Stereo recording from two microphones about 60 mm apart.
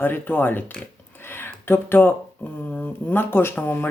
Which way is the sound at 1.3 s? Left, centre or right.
Left.